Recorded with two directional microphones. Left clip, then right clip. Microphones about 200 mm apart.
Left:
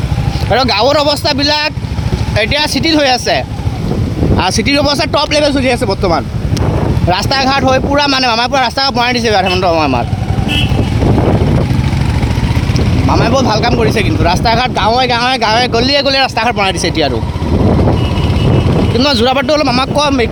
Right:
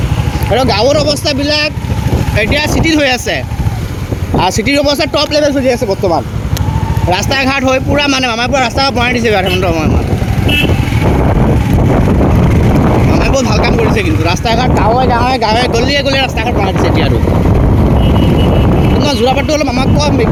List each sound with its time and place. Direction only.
0.5 s speech: 15° left (ahead or behind)
7.1 s speech: centre (ahead or behind)
13.2 s speech: centre (ahead or behind)
19.0 s speech: 20° left (ahead or behind)